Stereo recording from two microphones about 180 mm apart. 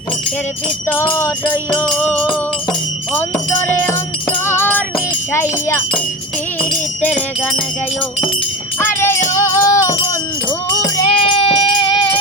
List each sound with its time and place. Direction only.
0.9 s music: 10° left (ahead or behind)
8.8 s music: 10° left (ahead or behind)
9.9 s wind chime: 20° left (ahead or behind)
10.7 s sheep: 25° left (ahead or behind)